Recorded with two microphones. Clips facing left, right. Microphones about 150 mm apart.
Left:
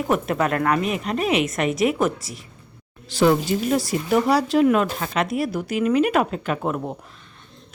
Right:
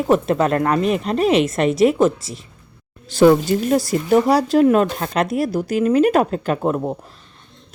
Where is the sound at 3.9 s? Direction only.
40° right (ahead or behind).